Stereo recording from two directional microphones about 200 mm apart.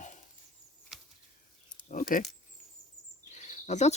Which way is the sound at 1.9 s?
45° left (ahead or behind).